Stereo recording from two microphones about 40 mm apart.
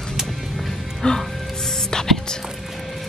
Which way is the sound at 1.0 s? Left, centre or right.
Left.